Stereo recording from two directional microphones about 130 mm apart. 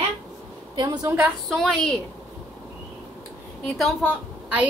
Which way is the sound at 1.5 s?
Centre (ahead or behind).